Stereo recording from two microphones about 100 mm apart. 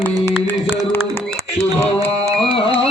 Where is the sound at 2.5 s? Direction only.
60° left (ahead or behind).